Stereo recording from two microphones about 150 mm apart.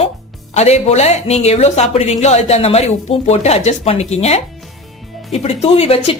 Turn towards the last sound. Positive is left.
turn(degrees=40)  # may be behind; listen again after turning